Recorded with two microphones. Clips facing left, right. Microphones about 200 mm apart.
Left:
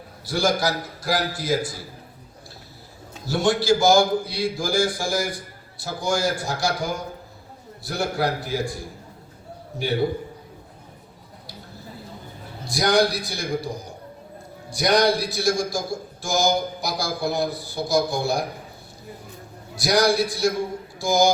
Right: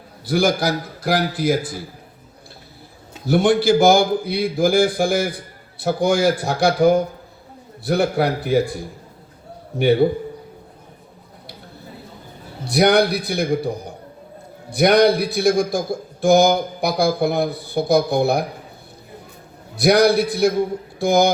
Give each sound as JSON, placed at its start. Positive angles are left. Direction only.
{"t": 0.3, "sound": "a man's voice", "side_deg": -55}
{"t": 3.2, "sound": "a man's voice", "side_deg": -60}
{"t": 9.7, "sound": "a man's voice", "side_deg": -60}
{"t": 12.6, "sound": "a man's voice", "side_deg": -65}
{"t": 19.8, "sound": "a man's voice", "side_deg": -60}